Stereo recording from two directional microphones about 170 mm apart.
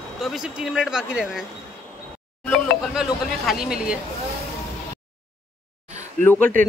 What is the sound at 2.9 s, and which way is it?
Speech, 5° right (ahead or behind).